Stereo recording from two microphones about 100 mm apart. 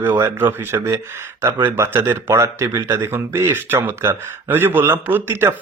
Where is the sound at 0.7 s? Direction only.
35° right (ahead or behind).